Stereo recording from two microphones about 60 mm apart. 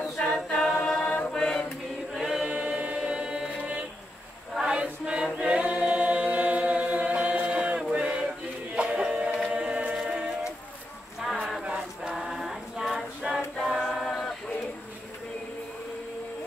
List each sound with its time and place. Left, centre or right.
0.2 s a capella: centre
1.3 s mantra: centre
2.1 s choir: centre
7.8 s music: centre
9.5 s chant: centre
9.9 s music: centre
11.2 s a sound: centre
11.6 s choir: centre
12.1 s choir: centre